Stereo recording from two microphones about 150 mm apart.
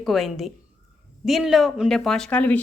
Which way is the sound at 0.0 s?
Centre (ahead or behind).